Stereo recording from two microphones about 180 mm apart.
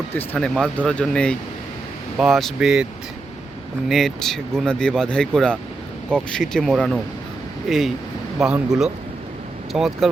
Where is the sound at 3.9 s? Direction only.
Centre (ahead or behind).